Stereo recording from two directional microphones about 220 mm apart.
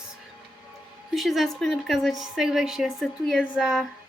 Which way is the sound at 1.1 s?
Centre (ahead or behind).